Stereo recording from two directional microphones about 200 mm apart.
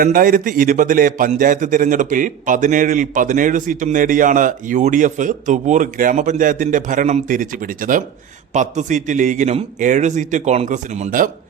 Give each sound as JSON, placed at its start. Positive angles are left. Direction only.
{"t": 0.0, "sound": "a man's voice", "side_deg": -45}